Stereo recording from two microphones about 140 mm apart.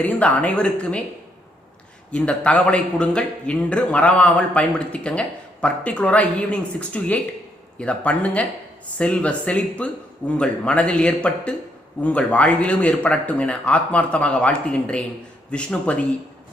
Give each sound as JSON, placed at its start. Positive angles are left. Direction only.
{"t": 0.0, "sound": "a man's voice", "side_deg": 10}
{"t": 2.1, "sound": "a man's voice", "side_deg": 10}